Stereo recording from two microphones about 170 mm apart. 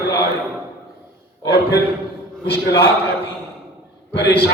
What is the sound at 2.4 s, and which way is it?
Speech, 75° left (ahead or behind).